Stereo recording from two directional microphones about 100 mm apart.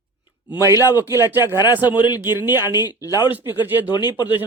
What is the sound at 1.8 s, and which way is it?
Speech, 45° left (ahead or behind).